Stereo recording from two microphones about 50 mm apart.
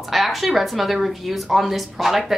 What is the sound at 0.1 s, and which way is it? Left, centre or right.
A woman's voice, centre.